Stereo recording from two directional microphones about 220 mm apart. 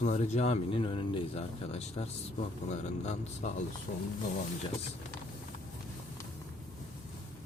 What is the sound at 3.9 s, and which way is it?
Speech, 45° left (ahead or behind).